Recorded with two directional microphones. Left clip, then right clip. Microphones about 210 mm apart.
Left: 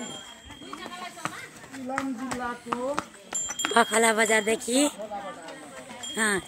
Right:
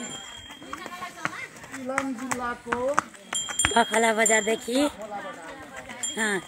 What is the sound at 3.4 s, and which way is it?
Livestock, 5° left (ahead or behind).